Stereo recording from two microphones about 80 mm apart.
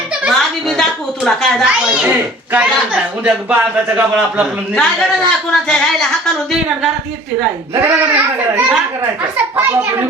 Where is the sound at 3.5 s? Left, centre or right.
Right.